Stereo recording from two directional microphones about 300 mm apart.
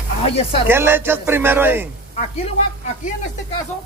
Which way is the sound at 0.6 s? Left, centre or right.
Centre.